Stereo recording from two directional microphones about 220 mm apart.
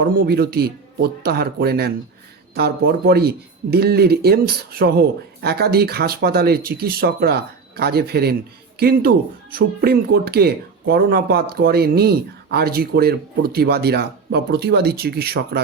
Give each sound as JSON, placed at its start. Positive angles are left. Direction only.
{"t": 0.0, "sound": "speech", "side_deg": -45}